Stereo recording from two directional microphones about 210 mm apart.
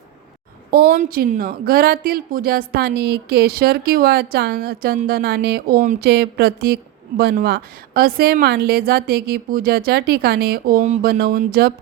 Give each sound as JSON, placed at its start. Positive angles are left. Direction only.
{"t": 0.7, "sound": "speech", "side_deg": -45}